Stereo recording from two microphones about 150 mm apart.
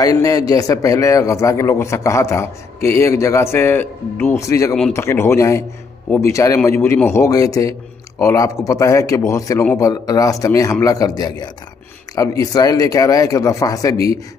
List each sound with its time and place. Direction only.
0.0 s a man's voice: 25° left (ahead or behind)